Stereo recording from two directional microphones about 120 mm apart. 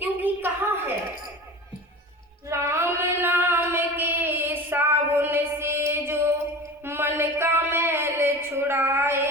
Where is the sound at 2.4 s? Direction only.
25° right (ahead or behind).